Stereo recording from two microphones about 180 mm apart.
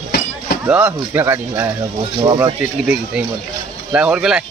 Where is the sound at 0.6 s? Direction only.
10° right (ahead or behind).